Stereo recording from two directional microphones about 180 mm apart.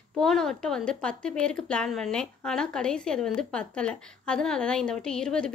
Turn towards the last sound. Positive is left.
turn(degrees=5)  # may be behind; listen again after turning